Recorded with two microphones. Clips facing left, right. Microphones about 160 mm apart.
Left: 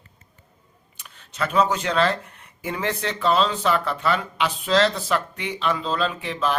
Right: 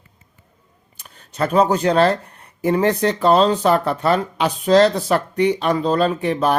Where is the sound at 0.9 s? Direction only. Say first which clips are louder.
Right 5 dB; 40° right (ahead or behind).